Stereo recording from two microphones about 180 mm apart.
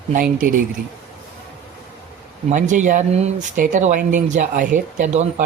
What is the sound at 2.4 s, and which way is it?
Speech, 45° right (ahead or behind).